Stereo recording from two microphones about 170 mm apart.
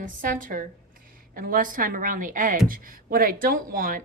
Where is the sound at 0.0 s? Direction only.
50° right (ahead or behind).